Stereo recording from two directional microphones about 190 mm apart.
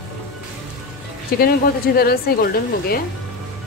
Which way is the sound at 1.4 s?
50° left (ahead or behind).